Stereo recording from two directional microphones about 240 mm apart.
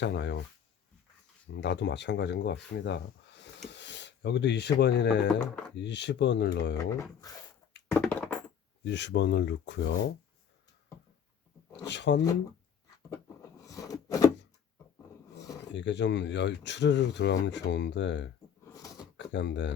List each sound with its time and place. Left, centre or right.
0.0 s speech: left
1.5 s speech: left
7.9 s a sound: centre
8.8 s speech: left
11.9 s speech: left
13.1 s a sound: centre
15.7 s speech: left